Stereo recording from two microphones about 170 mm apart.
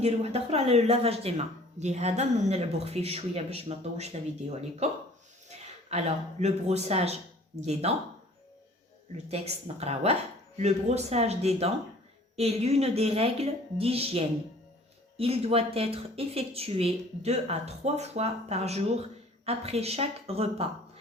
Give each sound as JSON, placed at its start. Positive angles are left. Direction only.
{"t": 0.0, "sound": "speech", "side_deg": -40}
{"t": 9.3, "sound": "speech", "side_deg": -40}